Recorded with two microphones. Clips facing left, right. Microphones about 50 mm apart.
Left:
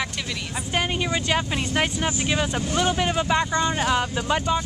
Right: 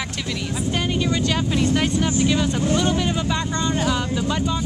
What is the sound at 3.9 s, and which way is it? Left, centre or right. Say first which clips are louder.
Speech: even; left.